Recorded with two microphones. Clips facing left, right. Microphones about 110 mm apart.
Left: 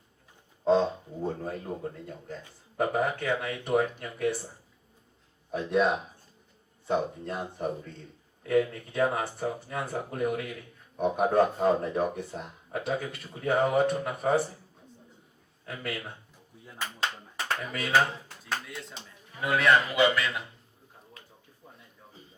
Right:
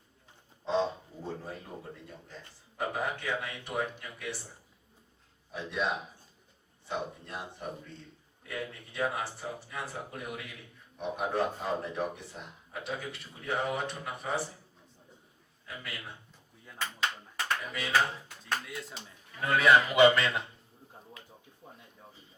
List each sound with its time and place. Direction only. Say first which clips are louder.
0.6 s speech: left 6 dB; 50° left (ahead or behind)
5.5 s a man's voice: left 8 dB; 50° left (ahead or behind)
15.6 s speech: left 7 dB; 50° left (ahead or behind)
17.7 s speech: left 3 dB; 55° left (ahead or behind)
18.6 s a man's voice: even; centre (ahead or behind)
19.9 s speech: right 3 dB; 25° right (ahead or behind)